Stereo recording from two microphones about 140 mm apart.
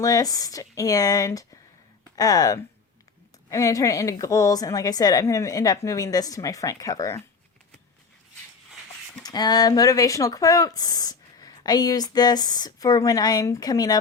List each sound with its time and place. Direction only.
0.0 s speech: 25° left (ahead or behind)
9.2 s speech: 30° left (ahead or behind)